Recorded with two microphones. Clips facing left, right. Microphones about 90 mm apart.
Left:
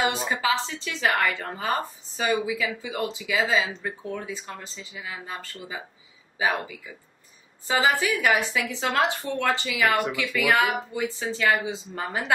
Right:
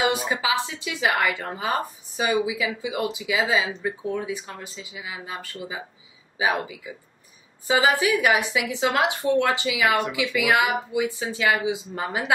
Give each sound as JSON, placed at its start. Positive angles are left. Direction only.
{"t": 0.0, "sound": "speech", "side_deg": -5}